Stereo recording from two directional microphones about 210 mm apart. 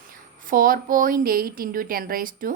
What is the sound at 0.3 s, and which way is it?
A woman's voice, 40° right (ahead or behind).